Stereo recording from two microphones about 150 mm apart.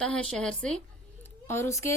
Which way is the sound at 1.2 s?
15° left (ahead or behind).